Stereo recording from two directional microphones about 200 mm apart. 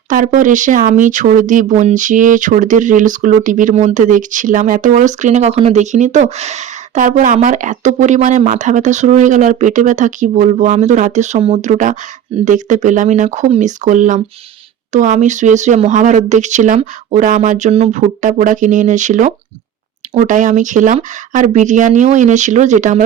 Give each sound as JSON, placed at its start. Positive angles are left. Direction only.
{"t": 0.1, "sound": "speech", "side_deg": -40}